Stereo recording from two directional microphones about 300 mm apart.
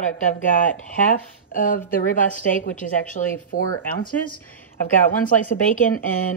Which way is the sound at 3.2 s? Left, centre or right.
Left.